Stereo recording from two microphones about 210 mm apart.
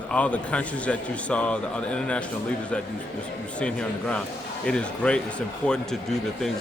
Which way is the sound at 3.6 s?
5° left (ahead or behind).